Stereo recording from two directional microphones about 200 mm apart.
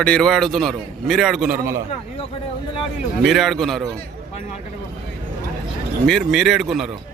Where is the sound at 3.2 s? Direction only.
Centre (ahead or behind).